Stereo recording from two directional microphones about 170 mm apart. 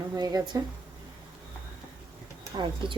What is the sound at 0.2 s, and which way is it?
Speech, 25° right (ahead or behind).